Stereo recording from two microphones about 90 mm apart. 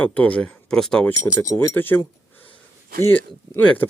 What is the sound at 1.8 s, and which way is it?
Speech, 20° left (ahead or behind).